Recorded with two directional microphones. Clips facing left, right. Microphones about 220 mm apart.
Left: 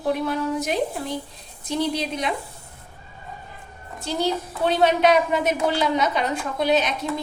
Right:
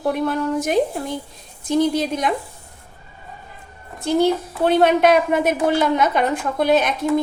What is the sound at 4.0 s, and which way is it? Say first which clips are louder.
A woman's voice: right 7 dB; 55° right (ahead or behind).